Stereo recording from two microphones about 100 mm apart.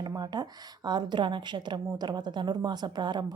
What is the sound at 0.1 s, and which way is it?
A woman's voice, 45° right (ahead or behind).